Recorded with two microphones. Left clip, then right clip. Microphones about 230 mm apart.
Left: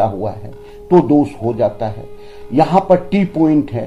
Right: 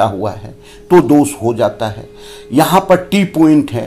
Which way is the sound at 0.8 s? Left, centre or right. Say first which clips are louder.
Right 3 dB; centre.